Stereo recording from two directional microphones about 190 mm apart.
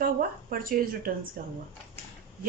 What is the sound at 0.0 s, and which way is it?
Speech, 50° right (ahead or behind).